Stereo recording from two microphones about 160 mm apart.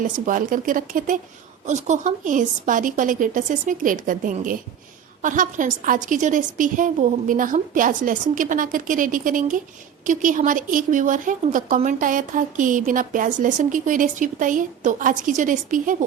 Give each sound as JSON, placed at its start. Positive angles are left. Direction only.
{"t": 0.0, "sound": "a woman's voice", "side_deg": -55}